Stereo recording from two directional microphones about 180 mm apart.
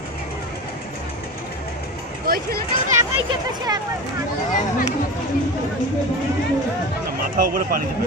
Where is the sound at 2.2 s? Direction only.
55° right (ahead or behind).